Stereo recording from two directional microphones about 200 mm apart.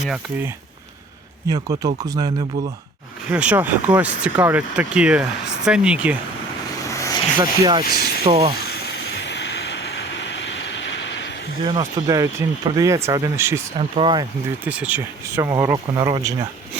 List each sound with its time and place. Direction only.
0.0 s speech: 5° right (ahead or behind)
1.5 s speech: 20° right (ahead or behind)
3.2 s speech: 5° right (ahead or behind)
6.9 s vehicle: 15° left (ahead or behind)
7.3 s speech: 20° right (ahead or behind)
7.9 s speech: 50° left (ahead or behind)
8.2 s speech: 25° right (ahead or behind)
8.5 s vehicle: 55° left (ahead or behind)
11.6 s speech: 20° right (ahead or behind)
13.7 s speech: 25° right (ahead or behind)
14.6 s speech: 5° right (ahead or behind)